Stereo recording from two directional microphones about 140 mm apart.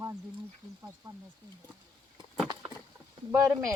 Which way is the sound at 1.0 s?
30° right (ahead or behind).